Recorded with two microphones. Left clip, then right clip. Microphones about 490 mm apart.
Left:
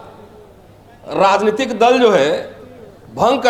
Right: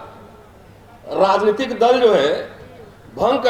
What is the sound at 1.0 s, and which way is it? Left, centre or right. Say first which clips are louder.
A man's voice: left 2 dB; left.